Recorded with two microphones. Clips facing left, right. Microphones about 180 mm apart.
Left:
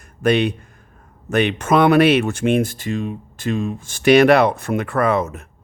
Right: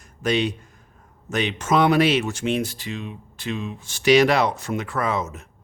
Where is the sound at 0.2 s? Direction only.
60° left (ahead or behind).